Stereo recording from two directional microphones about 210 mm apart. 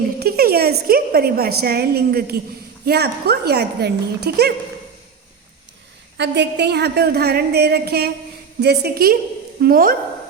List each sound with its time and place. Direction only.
0.2 s a woman's voice: 45° right (ahead or behind)
6.1 s a woman's voice: 55° right (ahead or behind)